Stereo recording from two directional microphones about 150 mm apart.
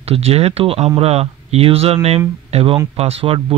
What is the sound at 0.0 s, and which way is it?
Speech, 40° right (ahead or behind).